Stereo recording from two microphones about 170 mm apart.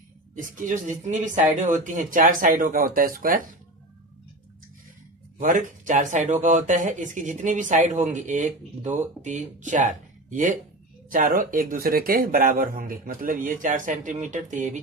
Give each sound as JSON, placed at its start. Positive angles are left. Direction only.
{"t": 0.4, "sound": "speech", "side_deg": -50}
{"t": 5.4, "sound": "speech", "side_deg": -50}